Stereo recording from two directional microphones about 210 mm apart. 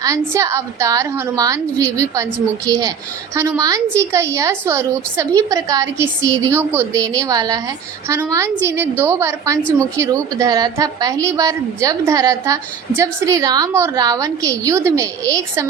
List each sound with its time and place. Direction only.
0.0 s a woman's voice: 15° right (ahead or behind)